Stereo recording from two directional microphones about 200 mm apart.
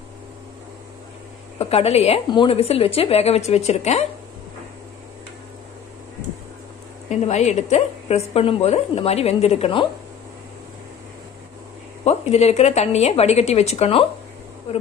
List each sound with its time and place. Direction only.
1.6 s a woman's voice: 30° left (ahead or behind)
7.1 s a woman's voice: 35° left (ahead or behind)
12.0 s a woman's voice: 35° left (ahead or behind)